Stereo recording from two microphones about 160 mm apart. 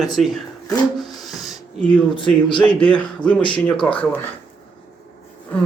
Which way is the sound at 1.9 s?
30° left (ahead or behind).